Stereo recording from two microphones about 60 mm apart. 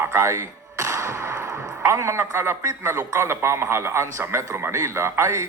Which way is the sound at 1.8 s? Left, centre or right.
Right.